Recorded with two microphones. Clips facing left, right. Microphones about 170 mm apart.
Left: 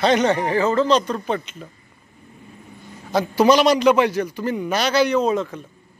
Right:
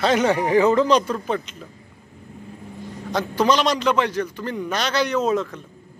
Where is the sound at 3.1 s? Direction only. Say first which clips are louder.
Left 4 dB; 10° left (ahead or behind).